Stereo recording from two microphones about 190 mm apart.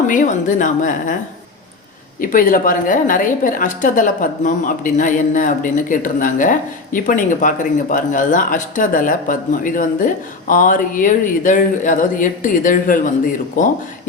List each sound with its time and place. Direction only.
0.1 s a woman's voice: 45° left (ahead or behind)
2.2 s a woman's voice: 45° left (ahead or behind)